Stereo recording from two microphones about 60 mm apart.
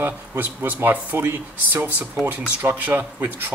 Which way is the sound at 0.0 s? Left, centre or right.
Right.